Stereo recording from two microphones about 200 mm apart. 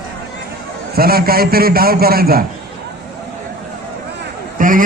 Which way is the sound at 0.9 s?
50° right (ahead or behind).